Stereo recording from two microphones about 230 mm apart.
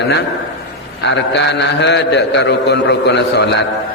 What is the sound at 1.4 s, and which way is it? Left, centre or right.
A man's voice, left.